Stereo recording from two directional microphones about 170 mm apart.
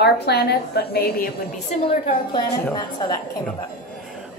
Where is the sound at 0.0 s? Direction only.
75° left (ahead or behind).